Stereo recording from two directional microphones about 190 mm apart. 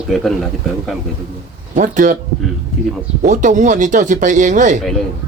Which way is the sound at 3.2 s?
40° right (ahead or behind).